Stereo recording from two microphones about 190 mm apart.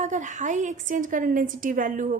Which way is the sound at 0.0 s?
40° right (ahead or behind).